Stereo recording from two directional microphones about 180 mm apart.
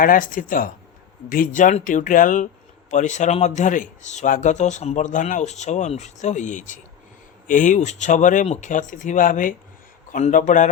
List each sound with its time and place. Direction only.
0.0 s speech: 50° left (ahead or behind)